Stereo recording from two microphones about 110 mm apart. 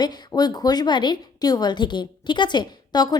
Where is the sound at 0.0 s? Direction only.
40° left (ahead or behind).